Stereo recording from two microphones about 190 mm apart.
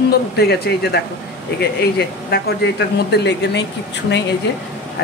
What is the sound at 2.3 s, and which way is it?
A woman's voice, 60° left (ahead or behind).